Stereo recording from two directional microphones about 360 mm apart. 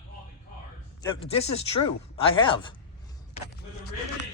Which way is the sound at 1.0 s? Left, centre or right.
Centre.